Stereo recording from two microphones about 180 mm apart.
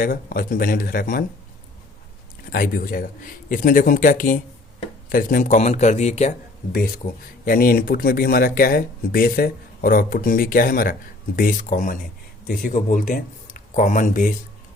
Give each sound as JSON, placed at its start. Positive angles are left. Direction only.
{"t": 0.0, "sound": "speech", "side_deg": 55}
{"t": 2.5, "sound": "a man's voice", "side_deg": 50}
{"t": 7.0, "sound": "speech", "side_deg": 55}